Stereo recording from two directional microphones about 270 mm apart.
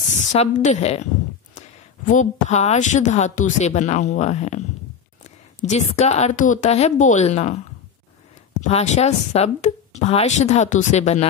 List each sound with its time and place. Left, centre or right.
0.3 s a woman's voice: left
2.0 s a woman's voice: left
8.5 s a woman's voice: left